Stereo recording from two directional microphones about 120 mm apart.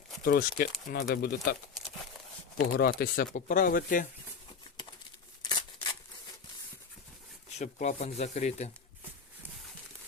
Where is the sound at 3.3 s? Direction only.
90° left.